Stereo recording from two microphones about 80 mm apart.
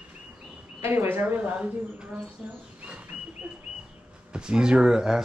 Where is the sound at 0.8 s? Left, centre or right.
Right.